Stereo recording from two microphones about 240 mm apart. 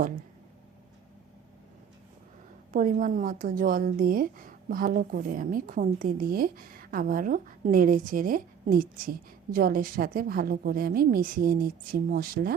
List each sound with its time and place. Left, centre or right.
2.7 s a woman's voice: right